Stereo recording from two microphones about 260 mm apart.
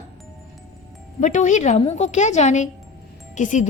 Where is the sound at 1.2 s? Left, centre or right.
Left.